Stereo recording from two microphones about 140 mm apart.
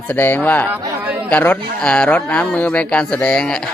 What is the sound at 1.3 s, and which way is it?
Speech, 10° left (ahead or behind).